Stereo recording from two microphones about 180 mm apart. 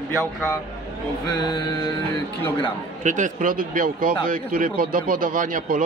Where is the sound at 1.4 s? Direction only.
25° left (ahead or behind).